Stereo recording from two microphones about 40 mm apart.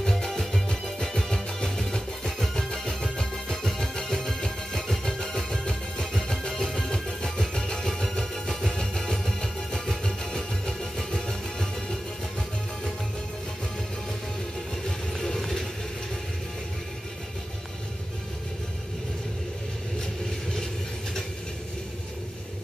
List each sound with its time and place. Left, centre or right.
0.1 s music: centre
5.0 s music: centre
14.9 s music: centre